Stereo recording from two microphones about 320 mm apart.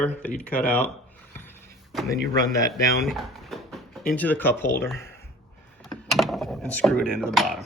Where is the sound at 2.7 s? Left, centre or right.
Centre.